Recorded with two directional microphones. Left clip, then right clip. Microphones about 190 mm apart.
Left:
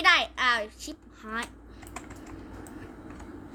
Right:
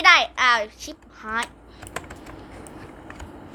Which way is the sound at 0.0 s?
15° left (ahead or behind).